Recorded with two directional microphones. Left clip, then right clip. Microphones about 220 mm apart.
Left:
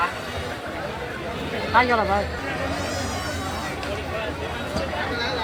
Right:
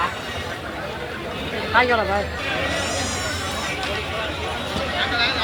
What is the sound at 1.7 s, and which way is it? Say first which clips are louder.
Speech: right 1 dB; 50° left (ahead or behind).